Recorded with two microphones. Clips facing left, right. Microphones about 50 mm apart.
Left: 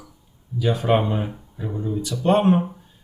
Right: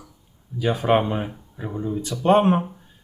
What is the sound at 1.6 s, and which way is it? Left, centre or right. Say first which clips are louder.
Speech: even; right.